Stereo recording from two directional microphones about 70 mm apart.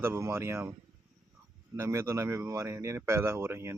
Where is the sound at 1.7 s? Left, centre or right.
Right.